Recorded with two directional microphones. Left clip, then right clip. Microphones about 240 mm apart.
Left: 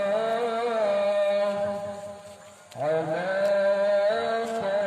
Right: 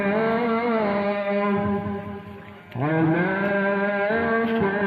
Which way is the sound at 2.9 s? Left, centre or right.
Left.